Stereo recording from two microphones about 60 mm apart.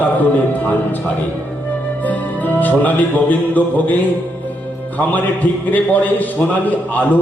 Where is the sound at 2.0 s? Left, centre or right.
Left.